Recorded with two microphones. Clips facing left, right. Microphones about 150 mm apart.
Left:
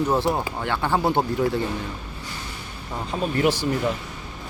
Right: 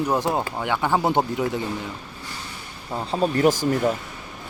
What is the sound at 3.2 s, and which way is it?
Speech, 40° right (ahead or behind).